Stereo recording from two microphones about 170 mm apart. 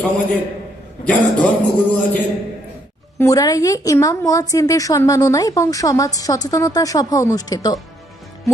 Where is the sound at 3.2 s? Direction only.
20° left (ahead or behind).